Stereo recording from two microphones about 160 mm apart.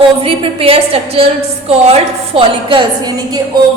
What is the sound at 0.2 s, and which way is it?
A woman's voice, 35° right (ahead or behind).